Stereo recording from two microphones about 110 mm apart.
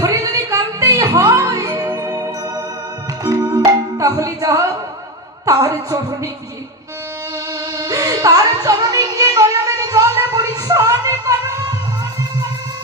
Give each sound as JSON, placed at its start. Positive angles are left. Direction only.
{"t": 0.0, "sound": "music", "side_deg": -35}
{"t": 5.5, "sound": "speech", "side_deg": -35}
{"t": 7.8, "sound": "music", "side_deg": -35}